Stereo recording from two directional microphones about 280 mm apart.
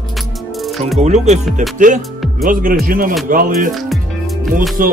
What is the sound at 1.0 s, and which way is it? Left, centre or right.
Speech, right.